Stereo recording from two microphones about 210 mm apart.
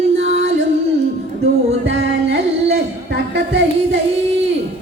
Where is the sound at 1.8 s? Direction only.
60° right (ahead or behind).